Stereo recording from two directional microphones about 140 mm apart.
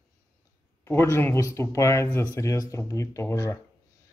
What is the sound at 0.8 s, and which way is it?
Speech, 20° left (ahead or behind).